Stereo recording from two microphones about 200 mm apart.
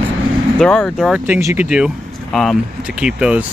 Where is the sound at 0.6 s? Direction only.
5° left (ahead or behind).